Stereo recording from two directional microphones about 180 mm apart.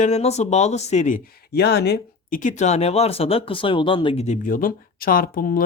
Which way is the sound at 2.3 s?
45° left (ahead or behind).